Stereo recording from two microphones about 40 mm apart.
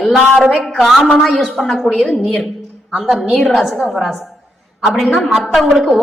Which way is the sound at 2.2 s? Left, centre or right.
Centre.